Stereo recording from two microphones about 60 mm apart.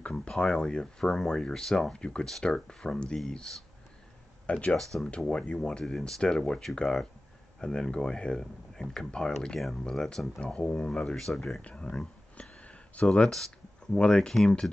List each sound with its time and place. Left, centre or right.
0.0 s speech: centre
4.5 s speech: left
10.4 s speech: centre
11.6 s a sound: centre
13.3 s speech: centre